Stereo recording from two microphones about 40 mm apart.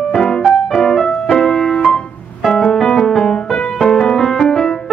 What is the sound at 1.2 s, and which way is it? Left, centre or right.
Music, centre.